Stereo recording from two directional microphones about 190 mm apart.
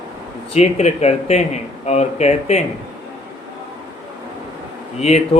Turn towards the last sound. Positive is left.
turn(degrees=35)  # may be behind; listen again after turning